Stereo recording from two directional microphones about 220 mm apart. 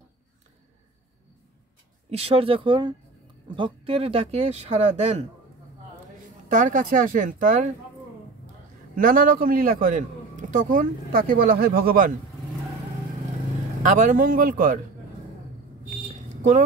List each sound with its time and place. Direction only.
2.0 s speech: 25° right (ahead or behind)
6.5 s a man's voice: 35° right (ahead or behind)
8.9 s a man's voice: 40° right (ahead or behind)
13.8 s a man's voice: 35° right (ahead or behind)